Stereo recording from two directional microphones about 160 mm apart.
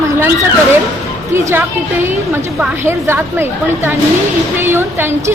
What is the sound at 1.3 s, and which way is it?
A woman's voice, 15° right (ahead or behind).